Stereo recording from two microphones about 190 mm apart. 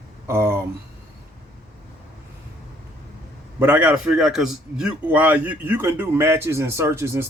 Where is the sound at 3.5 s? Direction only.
10° right (ahead or behind).